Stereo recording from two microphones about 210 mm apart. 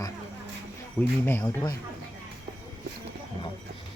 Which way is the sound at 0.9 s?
10° left (ahead or behind).